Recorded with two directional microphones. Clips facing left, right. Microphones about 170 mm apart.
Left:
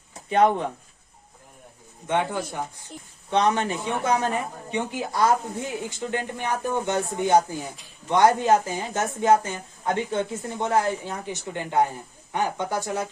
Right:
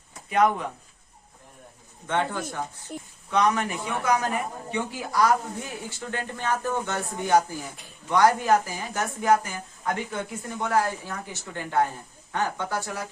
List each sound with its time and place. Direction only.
0.3 s a man's voice: 30° left (ahead or behind)
2.0 s speech: 15° left (ahead or behind)
3.2 s a man's voice: 30° left (ahead or behind)